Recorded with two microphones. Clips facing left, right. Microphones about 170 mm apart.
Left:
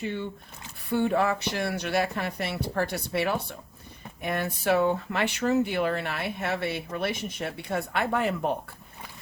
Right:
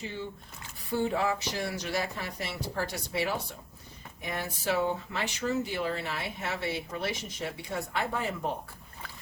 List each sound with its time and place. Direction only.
0.9 s speech: 60° left (ahead or behind)